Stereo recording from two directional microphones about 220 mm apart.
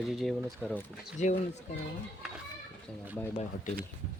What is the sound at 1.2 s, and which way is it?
Speech, 35° left (ahead or behind).